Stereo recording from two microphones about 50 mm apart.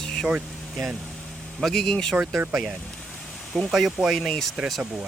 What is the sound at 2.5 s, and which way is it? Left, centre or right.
Speech, centre.